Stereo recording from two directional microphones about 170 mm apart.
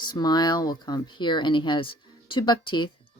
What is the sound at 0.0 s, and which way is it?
Speech, 25° left (ahead or behind).